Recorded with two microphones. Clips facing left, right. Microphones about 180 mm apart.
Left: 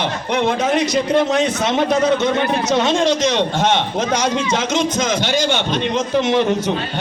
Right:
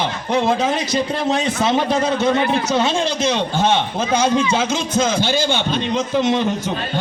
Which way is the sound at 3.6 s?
70° left (ahead or behind).